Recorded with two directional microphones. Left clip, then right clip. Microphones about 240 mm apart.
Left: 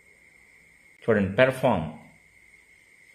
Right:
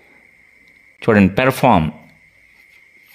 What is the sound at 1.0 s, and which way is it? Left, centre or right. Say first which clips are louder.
Speech: right 7 dB; right.